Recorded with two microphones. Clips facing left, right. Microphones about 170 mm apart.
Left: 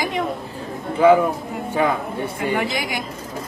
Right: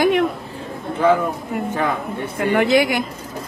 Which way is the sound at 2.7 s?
65° right (ahead or behind).